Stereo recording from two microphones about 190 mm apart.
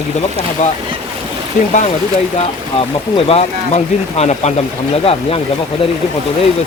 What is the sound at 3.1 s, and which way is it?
Speech, 30° left (ahead or behind).